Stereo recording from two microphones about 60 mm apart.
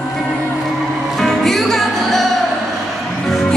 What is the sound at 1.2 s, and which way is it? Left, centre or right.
Music, centre.